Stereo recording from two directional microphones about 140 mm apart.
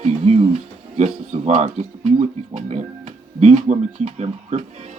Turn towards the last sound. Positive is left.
turn(degrees=-55)  # may be behind; listen again after turning